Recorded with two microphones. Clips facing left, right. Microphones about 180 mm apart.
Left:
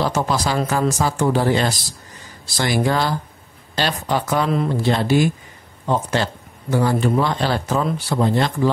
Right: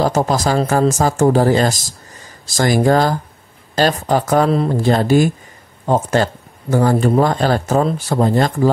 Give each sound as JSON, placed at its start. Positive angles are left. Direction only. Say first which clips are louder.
{"t": 0.0, "sound": "speech", "louder": "right 4 dB", "side_deg": -45}